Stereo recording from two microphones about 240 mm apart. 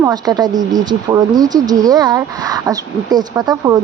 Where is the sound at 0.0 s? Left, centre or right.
Centre.